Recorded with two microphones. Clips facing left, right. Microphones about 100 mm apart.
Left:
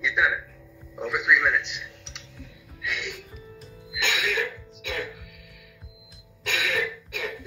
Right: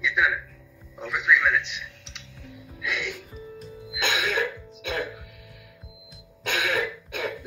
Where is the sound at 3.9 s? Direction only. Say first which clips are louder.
Right 1 dB; 35° right (ahead or behind).